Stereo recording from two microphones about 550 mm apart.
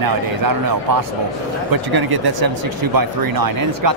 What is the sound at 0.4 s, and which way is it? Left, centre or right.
Speech, right.